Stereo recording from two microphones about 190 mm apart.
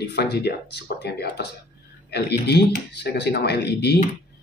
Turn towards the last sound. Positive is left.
turn(degrees=60)  # may be behind; listen again after turning